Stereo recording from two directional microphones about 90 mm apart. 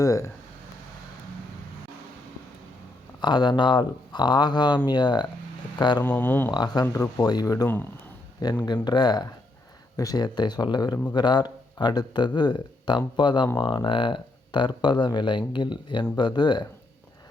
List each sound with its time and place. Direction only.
0.0 s speech: 35° left (ahead or behind)
3.2 s speech: 55° left (ahead or behind)
6.0 s speech: 20° left (ahead or behind)
6.5 s speech: 55° left (ahead or behind)
13.8 s speech: 70° left (ahead or behind); by 16.6 s 55° left (ahead or behind)